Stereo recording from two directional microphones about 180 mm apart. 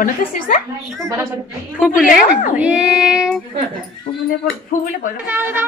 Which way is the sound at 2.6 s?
5° right (ahead or behind).